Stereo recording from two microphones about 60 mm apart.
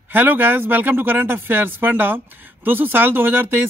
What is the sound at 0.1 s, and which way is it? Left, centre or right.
Speech, right.